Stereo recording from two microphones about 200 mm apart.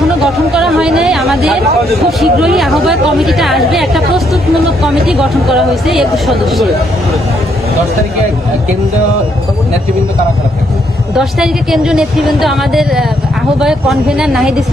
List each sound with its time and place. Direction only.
0.2 s chatter: centre (ahead or behind)
2.0 s speech: centre (ahead or behind)
11.1 s speech: centre (ahead or behind)